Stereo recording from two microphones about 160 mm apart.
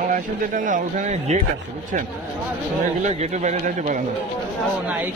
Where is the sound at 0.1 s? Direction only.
55° right (ahead or behind).